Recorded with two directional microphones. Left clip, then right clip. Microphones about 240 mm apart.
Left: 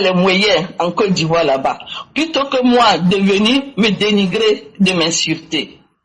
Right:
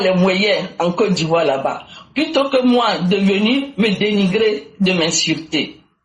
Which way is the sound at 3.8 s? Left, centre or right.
Left.